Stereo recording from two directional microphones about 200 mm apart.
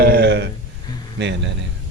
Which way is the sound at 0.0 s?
50° right (ahead or behind).